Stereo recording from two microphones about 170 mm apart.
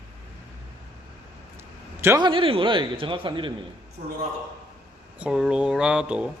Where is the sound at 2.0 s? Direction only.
15° right (ahead or behind).